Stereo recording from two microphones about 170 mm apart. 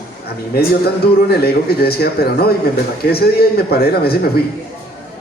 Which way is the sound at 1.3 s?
65° left (ahead or behind).